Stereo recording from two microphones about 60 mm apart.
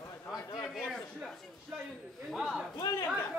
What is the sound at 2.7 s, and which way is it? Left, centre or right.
Chatter, left.